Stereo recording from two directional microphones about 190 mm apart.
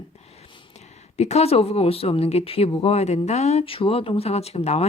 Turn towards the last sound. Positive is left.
turn(degrees=35)  # may be behind; listen again after turning